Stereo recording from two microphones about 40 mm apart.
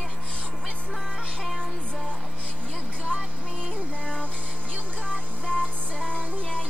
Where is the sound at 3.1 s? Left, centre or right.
Right.